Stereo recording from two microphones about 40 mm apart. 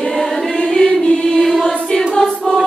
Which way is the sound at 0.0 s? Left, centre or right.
Centre.